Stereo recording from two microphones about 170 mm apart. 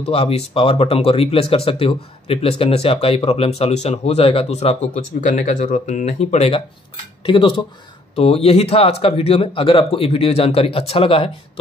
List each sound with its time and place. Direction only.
0.0 s speech: 35° left (ahead or behind)